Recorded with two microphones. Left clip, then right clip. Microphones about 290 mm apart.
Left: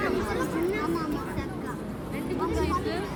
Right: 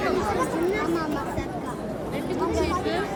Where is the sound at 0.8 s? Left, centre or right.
Left.